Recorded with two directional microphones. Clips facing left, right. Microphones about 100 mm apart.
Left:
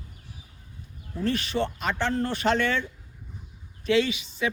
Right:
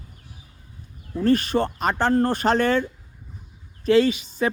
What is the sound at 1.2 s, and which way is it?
Speech, 45° right (ahead or behind).